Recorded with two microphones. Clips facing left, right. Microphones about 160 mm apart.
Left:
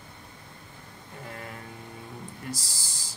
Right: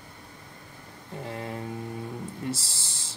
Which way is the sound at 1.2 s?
25° right (ahead or behind).